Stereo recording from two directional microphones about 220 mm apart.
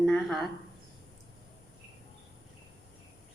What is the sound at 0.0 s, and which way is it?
Speech, centre (ahead or behind).